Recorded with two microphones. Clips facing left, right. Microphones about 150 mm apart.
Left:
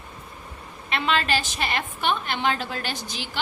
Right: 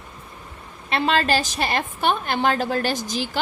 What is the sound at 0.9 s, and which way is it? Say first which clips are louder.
A woman's voice: right 4 dB; 35° right (ahead or behind).